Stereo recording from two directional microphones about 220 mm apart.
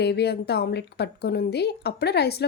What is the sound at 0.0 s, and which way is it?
Speech, 50° left (ahead or behind).